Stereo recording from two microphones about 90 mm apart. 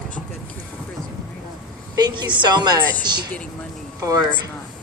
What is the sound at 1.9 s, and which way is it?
Speech, 50° right (ahead or behind).